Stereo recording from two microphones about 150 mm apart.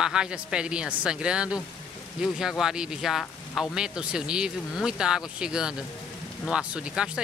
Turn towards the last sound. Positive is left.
turn(degrees=-5)  # may be behind; listen again after turning